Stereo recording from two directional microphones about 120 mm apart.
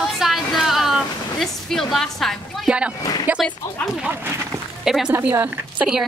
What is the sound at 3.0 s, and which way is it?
Speech, 35° left (ahead or behind).